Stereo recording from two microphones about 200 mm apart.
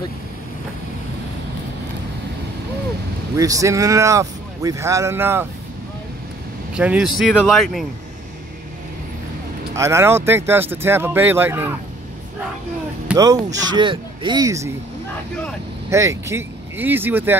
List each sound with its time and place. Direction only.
3.3 s speech: 15° right (ahead or behind)
6.7 s speech: 5° right (ahead or behind)
9.8 s speech: 15° right (ahead or behind)
13.1 s speech: 15° right (ahead or behind)
15.9 s speech: 15° right (ahead or behind)